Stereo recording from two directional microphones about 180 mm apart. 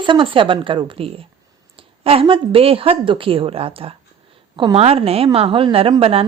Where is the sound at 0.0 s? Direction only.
25° right (ahead or behind).